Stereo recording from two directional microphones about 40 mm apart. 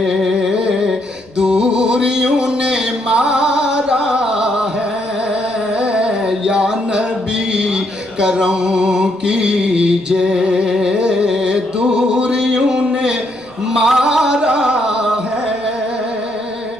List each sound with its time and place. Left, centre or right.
0.1 s music: centre
1.4 s music: right
5.8 s music: right
6.4 s a sound: right
7.5 s music: right